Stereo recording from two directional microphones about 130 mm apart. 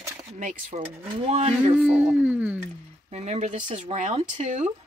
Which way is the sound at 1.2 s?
55° right (ahead or behind).